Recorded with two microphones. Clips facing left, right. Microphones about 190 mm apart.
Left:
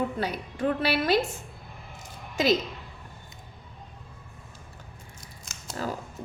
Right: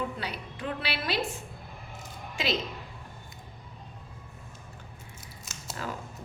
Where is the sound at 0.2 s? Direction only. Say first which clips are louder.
Left 8 dB; 45° left (ahead or behind).